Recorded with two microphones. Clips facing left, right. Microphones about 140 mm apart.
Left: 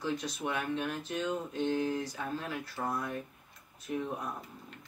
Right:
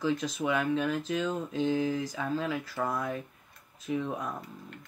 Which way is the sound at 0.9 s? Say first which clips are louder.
Right 4 dB; 90° right.